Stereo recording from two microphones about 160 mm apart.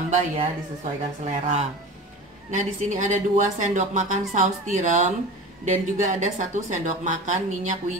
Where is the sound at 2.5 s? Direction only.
50° right (ahead or behind).